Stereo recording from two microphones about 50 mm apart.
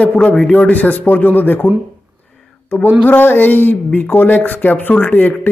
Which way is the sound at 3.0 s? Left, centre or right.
Left.